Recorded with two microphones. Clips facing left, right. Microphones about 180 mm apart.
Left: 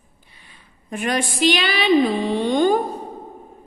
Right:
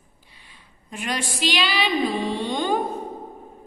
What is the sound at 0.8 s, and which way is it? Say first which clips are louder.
A woman's voice: left 6 dB; 55° left (ahead or behind).